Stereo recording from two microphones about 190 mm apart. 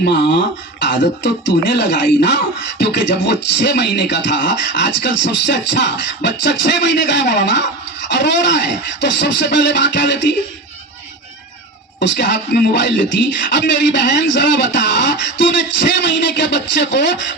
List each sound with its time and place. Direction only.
0.0 s speech: 70° left (ahead or behind)
11.9 s speech: 65° left (ahead or behind)